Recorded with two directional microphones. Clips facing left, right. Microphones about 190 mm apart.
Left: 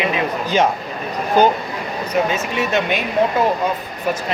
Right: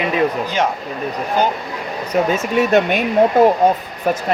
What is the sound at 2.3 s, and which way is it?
Speech, 55° right (ahead or behind).